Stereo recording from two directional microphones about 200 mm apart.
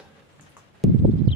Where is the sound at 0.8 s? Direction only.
Centre (ahead or behind).